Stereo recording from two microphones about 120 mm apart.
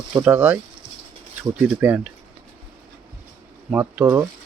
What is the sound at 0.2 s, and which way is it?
Speech, 15° right (ahead or behind).